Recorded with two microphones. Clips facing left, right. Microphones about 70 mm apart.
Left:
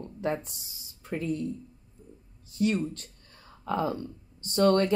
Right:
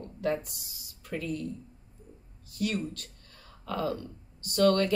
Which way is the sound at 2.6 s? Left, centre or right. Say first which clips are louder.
Left 4 dB; left.